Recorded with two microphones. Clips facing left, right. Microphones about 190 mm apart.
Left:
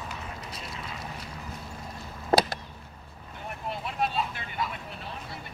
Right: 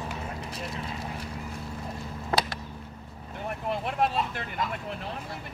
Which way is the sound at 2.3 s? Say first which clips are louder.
Left 5 dB; 35° left (ahead or behind).